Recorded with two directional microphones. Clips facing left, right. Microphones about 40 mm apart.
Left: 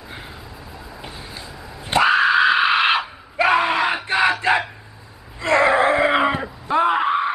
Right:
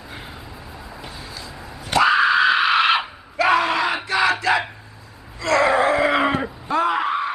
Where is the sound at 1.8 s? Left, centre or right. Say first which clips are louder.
Even; left.